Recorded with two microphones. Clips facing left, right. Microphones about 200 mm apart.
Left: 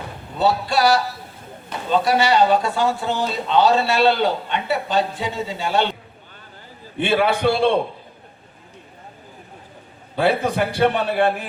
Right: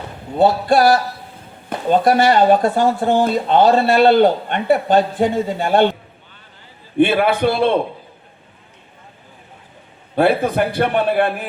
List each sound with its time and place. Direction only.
0.3 s speech: 50° right (ahead or behind)
7.0 s a man's voice: 55° right (ahead or behind)
10.2 s a man's voice: 55° right (ahead or behind)